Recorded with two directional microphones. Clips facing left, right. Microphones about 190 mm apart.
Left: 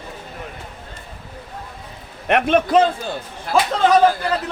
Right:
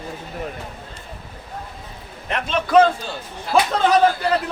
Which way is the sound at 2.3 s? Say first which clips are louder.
Left 8 dB; 60° left (ahead or behind).